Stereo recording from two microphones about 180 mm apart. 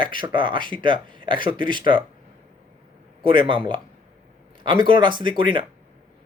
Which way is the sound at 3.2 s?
25° right (ahead or behind).